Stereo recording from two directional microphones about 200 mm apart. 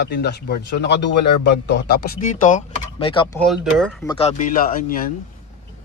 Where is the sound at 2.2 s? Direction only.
35° left (ahead or behind).